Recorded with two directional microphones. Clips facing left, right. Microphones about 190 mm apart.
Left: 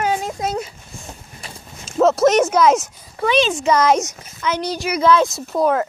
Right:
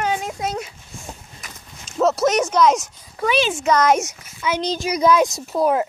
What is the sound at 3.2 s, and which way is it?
Speech, 10° right (ahead or behind).